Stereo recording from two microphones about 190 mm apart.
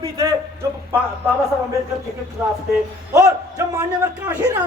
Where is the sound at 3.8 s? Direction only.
15° right (ahead or behind).